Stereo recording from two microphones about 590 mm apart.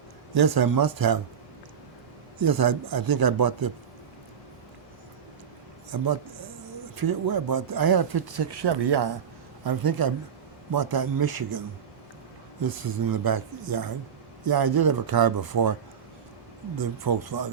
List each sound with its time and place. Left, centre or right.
0.3 s speech: right
2.4 s speech: right
5.9 s speech: right
12.6 s speech: right
16.7 s speech: right